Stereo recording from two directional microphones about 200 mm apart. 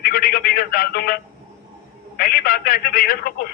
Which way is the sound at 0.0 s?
50° left (ahead or behind).